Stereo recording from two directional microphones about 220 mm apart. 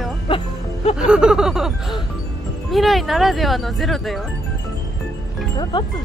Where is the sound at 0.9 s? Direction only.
5° right (ahead or behind).